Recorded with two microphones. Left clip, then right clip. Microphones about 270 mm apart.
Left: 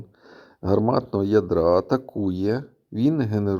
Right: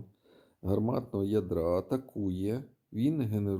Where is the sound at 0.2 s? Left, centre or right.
Left.